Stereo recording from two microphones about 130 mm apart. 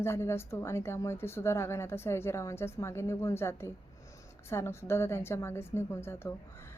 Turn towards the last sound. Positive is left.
turn(degrees=20)  # may be behind; listen again after turning